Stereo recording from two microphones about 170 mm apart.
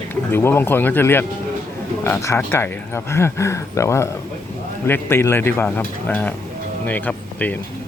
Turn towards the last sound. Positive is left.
turn(degrees=10)  # may be behind; listen again after turning